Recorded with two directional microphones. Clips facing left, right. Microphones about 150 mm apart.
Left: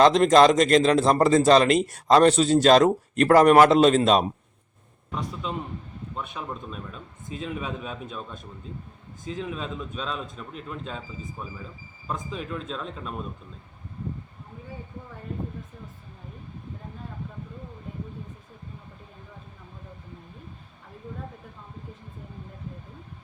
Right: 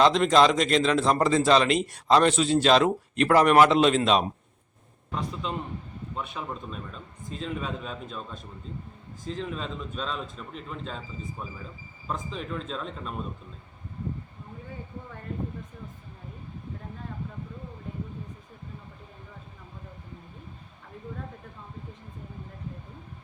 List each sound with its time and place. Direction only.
0.0 s a man's voice: 45° left (ahead or behind)
5.1 s a man's voice: 5° left (ahead or behind)